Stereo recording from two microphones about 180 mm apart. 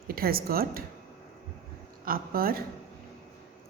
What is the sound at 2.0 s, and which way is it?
Speech, 55° right (ahead or behind).